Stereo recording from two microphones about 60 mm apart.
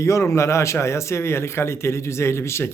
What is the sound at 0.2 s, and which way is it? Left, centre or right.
A man's voice, left.